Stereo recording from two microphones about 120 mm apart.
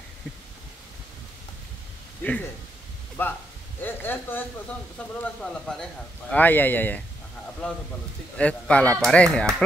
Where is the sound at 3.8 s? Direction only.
15° left (ahead or behind).